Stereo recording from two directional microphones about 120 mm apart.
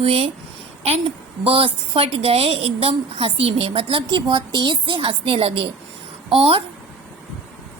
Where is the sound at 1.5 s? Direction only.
50° right (ahead or behind).